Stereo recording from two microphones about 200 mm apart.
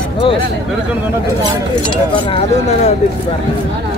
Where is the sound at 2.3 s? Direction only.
35° left (ahead or behind).